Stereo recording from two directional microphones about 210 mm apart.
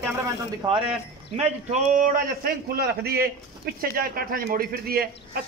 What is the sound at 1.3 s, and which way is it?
Speech, 35° right (ahead or behind).